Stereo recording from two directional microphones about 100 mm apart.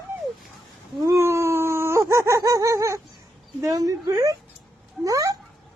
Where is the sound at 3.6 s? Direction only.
35° right (ahead or behind).